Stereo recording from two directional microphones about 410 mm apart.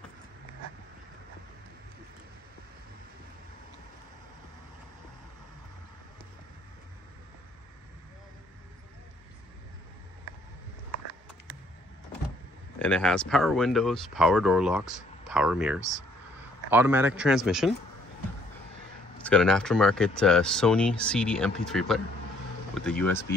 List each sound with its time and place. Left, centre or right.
10.9 s a sound: left
12.7 s speech: centre
19.2 s speech: centre